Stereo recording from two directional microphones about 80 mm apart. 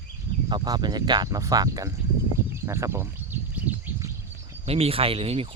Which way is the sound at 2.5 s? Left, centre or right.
Right.